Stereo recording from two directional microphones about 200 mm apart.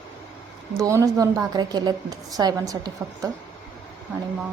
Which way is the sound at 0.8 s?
15° right (ahead or behind).